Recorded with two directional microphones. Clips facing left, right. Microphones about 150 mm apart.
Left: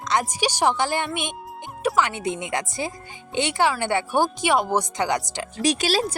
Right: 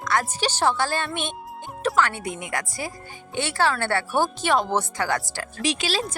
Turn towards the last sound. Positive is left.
turn(degrees=40)  # may be behind; listen again after turning